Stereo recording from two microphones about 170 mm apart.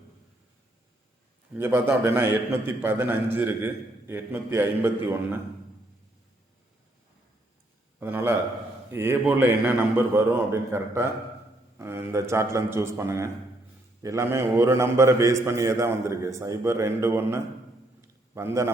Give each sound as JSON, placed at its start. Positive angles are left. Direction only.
{"t": 1.5, "sound": "a man's voice", "side_deg": -15}
{"t": 7.9, "sound": "a man's voice", "side_deg": -10}